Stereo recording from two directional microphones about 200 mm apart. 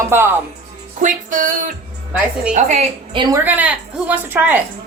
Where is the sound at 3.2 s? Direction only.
20° right (ahead or behind).